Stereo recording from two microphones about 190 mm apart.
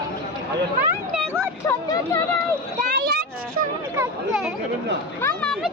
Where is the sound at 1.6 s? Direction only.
20° left (ahead or behind).